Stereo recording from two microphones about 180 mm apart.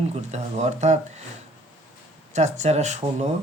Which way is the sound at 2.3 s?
40° right (ahead or behind).